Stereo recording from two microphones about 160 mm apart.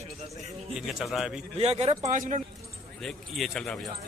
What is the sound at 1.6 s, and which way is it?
Speech, 40° right (ahead or behind).